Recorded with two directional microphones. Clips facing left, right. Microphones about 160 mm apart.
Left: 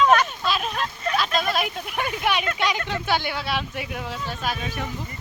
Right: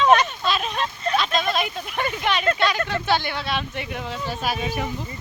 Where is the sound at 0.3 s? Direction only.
5° left (ahead or behind).